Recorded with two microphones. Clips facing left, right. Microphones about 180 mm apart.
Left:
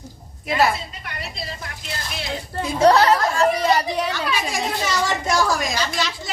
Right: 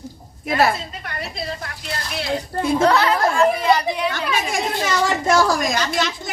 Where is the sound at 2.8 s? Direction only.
40° left (ahead or behind).